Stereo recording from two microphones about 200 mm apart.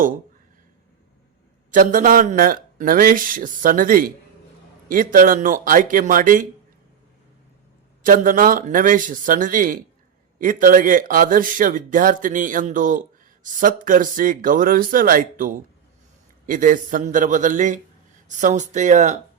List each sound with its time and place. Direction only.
1.7 s a man's voice: 40° right (ahead or behind)
8.0 s a man's voice: 45° right (ahead or behind)